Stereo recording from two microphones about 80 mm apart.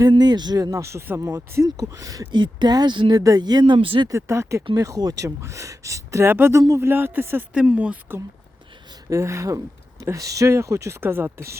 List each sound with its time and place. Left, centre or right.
0.0 s speech: right
1.6 s speech: right
2.3 s speech: right
3.2 s speech: right
4.1 s speech: right
4.7 s speech: right
6.2 s speech: right
6.6 s speech: right
6.8 s speech: right
7.5 s speech: centre
9.0 s speech: right
11.0 s speech: right